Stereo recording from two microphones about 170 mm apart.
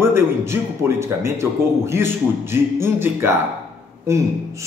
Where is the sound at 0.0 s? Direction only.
15° right (ahead or behind).